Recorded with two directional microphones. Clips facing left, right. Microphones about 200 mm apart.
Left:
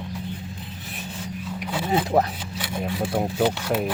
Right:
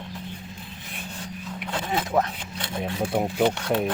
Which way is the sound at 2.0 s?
35° left (ahead or behind).